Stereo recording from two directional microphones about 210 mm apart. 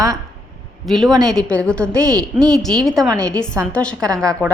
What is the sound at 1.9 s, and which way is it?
Speech, 15° right (ahead or behind).